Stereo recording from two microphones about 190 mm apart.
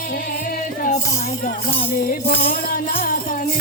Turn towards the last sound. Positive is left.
turn(degrees=50)  # may be behind; listen again after turning